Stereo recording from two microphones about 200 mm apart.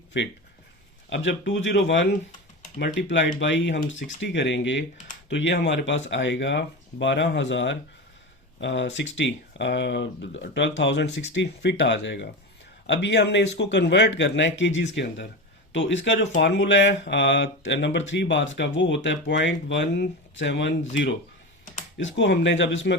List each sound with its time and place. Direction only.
0.1 s speech: 65° left (ahead or behind)
21.9 s speech: 65° left (ahead or behind)